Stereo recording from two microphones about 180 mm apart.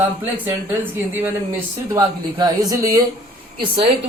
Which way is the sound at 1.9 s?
25° right (ahead or behind).